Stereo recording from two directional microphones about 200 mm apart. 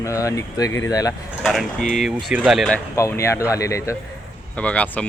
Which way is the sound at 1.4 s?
Centre (ahead or behind).